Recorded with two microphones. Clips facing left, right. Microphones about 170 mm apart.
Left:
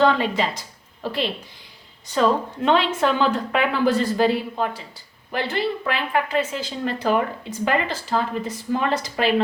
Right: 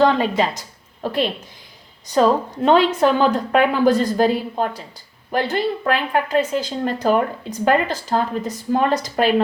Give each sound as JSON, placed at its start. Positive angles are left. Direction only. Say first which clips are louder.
{"t": 0.0, "sound": "speech", "louder": "right 3 dB", "side_deg": -45}
{"t": 2.0, "sound": "a woman's voice", "louder": "right 4 dB", "side_deg": -40}